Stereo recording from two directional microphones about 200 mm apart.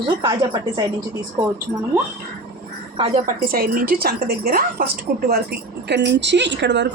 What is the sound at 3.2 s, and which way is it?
A woman's voice, 45° right (ahead or behind).